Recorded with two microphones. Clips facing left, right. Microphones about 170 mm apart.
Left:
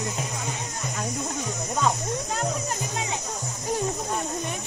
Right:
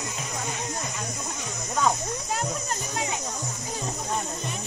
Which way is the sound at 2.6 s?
20° left (ahead or behind).